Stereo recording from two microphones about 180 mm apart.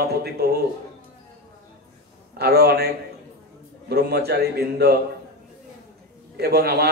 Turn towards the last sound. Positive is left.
turn(degrees=-60)  # may be behind; listen again after turning